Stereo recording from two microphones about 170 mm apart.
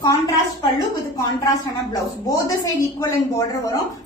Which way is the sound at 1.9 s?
20° left (ahead or behind).